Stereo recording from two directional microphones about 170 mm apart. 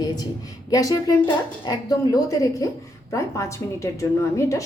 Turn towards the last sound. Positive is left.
turn(degrees=20)  # may be behind; listen again after turning